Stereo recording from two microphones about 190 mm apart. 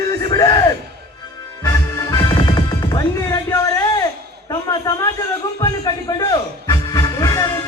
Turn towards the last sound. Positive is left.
turn(degrees=20)  # may be behind; listen again after turning